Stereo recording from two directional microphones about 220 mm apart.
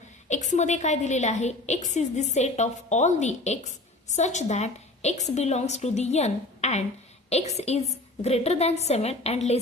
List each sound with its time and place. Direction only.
0.3 s a woman's voice: 30° left (ahead or behind)